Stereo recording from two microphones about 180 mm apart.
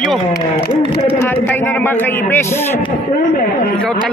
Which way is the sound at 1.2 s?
10° left (ahead or behind).